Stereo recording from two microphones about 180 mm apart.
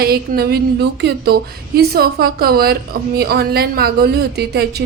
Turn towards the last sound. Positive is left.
turn(degrees=-65)  # may be behind; listen again after turning